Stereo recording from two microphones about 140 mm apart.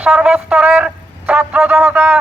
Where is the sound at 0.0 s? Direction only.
5° right (ahead or behind).